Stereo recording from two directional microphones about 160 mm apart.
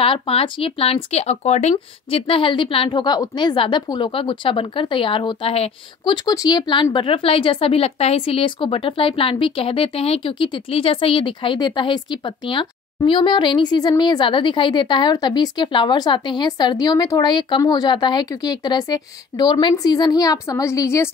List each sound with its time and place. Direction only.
0.0 s speech: 35° left (ahead or behind)
6.1 s speech: 25° left (ahead or behind)